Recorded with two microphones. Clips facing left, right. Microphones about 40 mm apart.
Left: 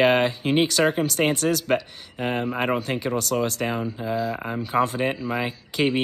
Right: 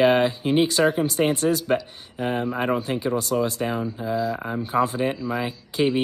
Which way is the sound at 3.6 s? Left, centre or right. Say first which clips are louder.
Even; centre.